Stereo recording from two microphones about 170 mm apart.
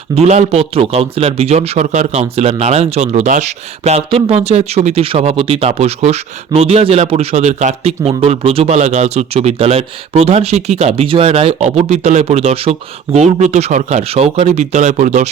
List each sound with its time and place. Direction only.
0.2 s a man's voice: 40° right (ahead or behind)